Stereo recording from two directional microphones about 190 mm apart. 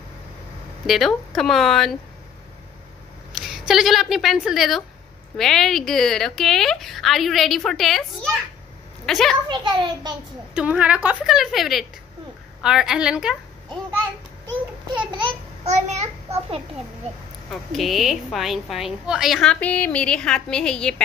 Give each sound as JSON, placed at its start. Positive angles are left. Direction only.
{"t": 0.8, "sound": "a woman's voice", "side_deg": 0}
{"t": 3.3, "sound": "a woman's voice", "side_deg": 0}
{"t": 9.5, "sound": "a child's voice", "side_deg": -25}
{"t": 10.5, "sound": "a woman's voice", "side_deg": -5}
{"t": 15.0, "sound": "a child's voice", "side_deg": -25}
{"t": 17.5, "sound": "a woman's voice", "side_deg": 0}